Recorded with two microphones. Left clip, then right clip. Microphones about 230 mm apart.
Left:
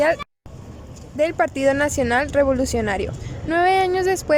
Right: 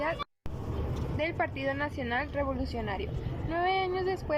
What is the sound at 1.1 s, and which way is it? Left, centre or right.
Speech, left.